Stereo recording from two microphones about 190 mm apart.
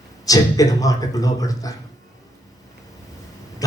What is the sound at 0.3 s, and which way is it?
Speech, 20° left (ahead or behind).